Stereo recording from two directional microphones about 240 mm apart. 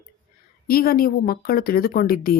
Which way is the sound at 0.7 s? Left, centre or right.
Left.